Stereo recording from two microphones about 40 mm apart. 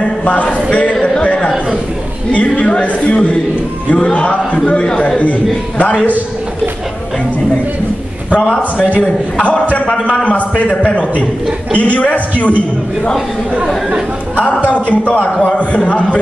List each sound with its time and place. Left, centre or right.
0.0 s a sound: left
1.0 s a man's voice: left
9.4 s a man's voice: left
14.6 s a man's voice: left